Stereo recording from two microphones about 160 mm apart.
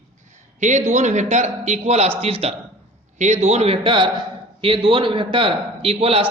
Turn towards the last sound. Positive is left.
turn(degrees=-40)  # may be behind; listen again after turning